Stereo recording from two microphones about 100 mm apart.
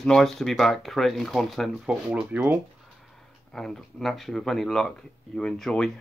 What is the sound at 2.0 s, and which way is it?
Speech, 10° right (ahead or behind).